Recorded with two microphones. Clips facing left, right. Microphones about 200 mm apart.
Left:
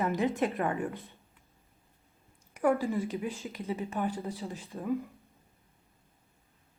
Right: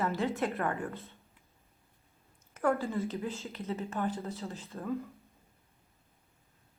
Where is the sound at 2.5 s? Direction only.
15° left (ahead or behind).